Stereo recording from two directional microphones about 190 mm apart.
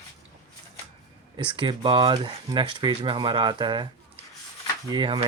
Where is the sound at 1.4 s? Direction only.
25° right (ahead or behind).